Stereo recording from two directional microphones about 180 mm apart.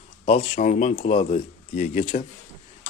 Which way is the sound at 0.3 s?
35° left (ahead or behind).